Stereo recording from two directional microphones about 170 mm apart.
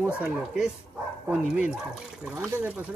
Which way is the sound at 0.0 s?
10° right (ahead or behind).